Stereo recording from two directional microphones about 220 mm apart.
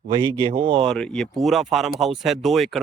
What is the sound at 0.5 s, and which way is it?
Speech, 25° right (ahead or behind).